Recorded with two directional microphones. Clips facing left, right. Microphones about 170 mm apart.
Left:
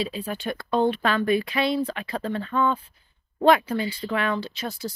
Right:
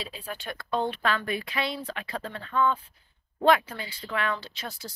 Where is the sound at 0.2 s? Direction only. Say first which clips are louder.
Left 7 dB; 5° left (ahead or behind).